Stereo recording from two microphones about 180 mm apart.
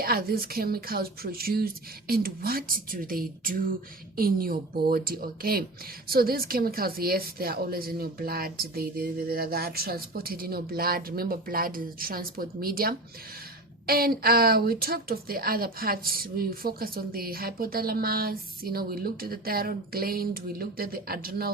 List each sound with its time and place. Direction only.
0.0 s a woman's voice: 55° right (ahead or behind)